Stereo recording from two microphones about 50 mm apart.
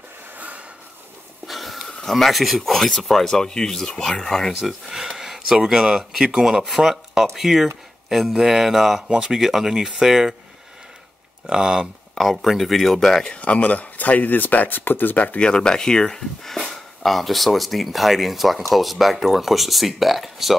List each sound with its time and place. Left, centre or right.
0.4 s snort: right
1.5 s a sound: centre
1.9 s speech: centre
4.6 s speech: centre
11.4 s speech: centre
12.2 s speech: centre
13.4 s speech: left
15.4 s speech: centre